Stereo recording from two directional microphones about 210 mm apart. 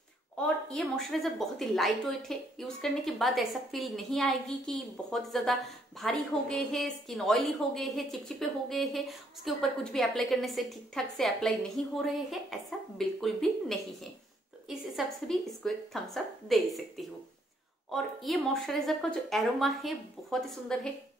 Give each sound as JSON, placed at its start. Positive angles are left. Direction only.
{"t": 0.7, "sound": "a woman's voice", "side_deg": 5}